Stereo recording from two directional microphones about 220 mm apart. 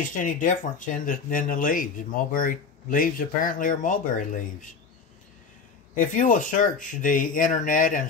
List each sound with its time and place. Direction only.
0.0 s speech: 35° left (ahead or behind)
5.9 s speech: 35° left (ahead or behind)